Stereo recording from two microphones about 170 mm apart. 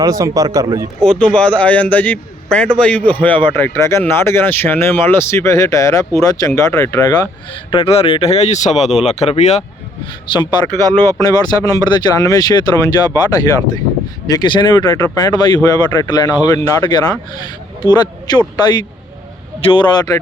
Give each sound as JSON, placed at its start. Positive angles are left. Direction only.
{"t": 0.0, "sound": "speech", "side_deg": -20}
{"t": 1.0, "sound": "speech", "side_deg": 5}
{"t": 7.7, "sound": "speech", "side_deg": 35}
{"t": 10.3, "sound": "speech", "side_deg": 30}